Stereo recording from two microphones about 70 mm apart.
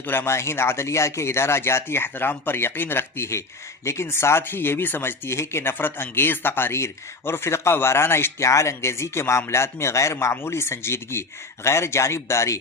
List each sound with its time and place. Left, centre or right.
0.0 s speech: left